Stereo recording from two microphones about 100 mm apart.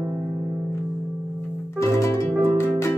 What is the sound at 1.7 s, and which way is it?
Music, 30° left (ahead or behind).